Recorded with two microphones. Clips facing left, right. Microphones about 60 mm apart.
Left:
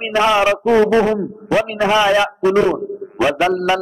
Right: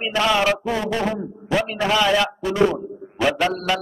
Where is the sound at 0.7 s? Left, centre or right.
Left.